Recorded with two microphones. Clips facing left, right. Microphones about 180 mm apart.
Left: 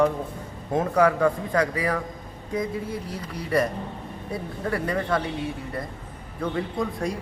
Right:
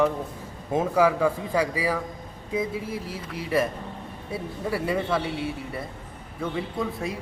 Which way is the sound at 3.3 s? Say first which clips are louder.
Left 1 dB; 5° right (ahead or behind).